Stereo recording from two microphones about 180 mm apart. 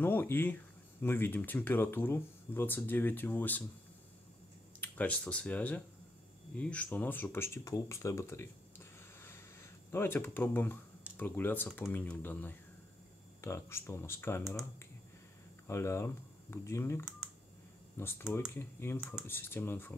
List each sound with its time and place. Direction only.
0.0 s speech: 10° left (ahead or behind)
4.7 s speech: 10° left (ahead or behind)
15.6 s speech: 15° left (ahead or behind)